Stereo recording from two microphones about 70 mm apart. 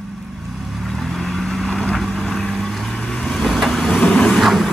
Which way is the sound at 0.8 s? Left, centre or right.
Centre.